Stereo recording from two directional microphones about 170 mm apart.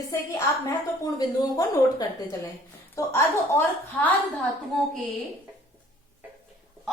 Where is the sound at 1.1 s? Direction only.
20° left (ahead or behind).